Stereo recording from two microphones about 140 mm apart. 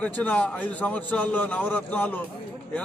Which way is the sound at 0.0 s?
10° left (ahead or behind).